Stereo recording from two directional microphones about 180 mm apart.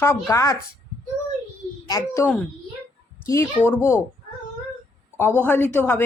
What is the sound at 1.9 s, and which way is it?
Speech, 15° left (ahead or behind).